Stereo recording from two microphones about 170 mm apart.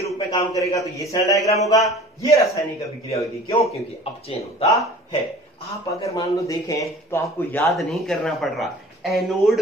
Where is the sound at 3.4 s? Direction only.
35° left (ahead or behind).